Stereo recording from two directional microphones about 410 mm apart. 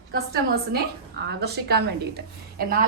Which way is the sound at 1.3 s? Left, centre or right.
Right.